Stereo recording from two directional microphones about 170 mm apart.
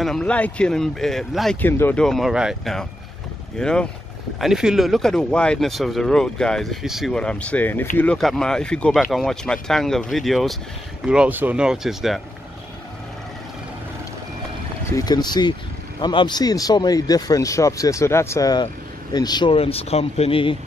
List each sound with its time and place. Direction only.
0.0 s speech: 5° left (ahead or behind)
1.6 s speech: 10° left (ahead or behind)
14.9 s speech: 20° left (ahead or behind)